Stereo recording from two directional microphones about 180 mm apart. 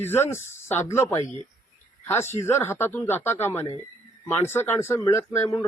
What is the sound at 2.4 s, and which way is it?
A man's voice, 15° left (ahead or behind).